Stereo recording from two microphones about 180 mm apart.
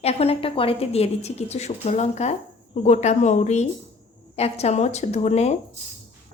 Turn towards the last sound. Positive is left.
turn(degrees=35)  # may be behind; listen again after turning